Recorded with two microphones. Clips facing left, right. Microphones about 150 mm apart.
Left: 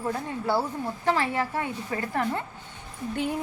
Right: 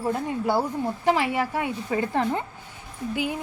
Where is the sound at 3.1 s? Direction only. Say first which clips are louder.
Even; 5° right (ahead or behind).